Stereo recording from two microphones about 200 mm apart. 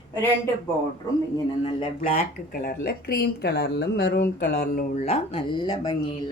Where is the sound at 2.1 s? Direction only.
50° left (ahead or behind).